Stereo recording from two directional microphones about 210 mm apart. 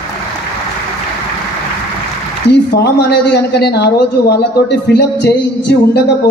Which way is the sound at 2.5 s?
50° left (ahead or behind).